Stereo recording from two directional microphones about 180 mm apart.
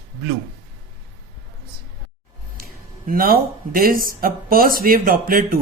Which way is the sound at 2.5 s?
55° right (ahead or behind).